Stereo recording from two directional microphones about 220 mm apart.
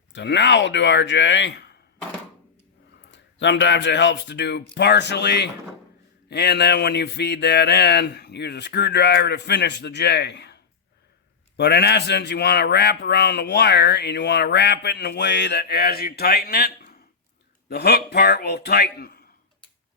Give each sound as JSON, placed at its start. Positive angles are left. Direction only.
{"t": 0.1, "sound": "speech", "side_deg": 55}
{"t": 3.1, "sound": "speech", "side_deg": 55}